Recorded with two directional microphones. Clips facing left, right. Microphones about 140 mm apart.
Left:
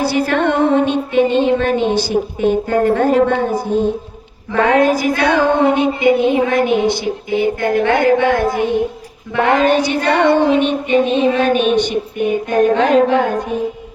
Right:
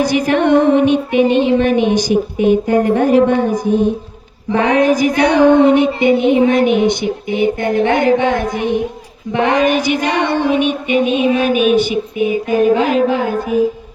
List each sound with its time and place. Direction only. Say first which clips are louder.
0.0 s a woman's voice: right 2 dB; 15° right (ahead or behind)